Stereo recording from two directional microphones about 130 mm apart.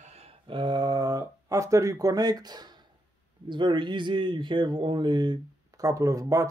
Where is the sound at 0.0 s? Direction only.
55° right (ahead or behind).